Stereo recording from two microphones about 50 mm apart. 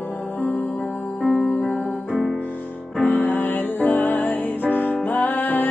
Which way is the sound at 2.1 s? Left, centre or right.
Centre.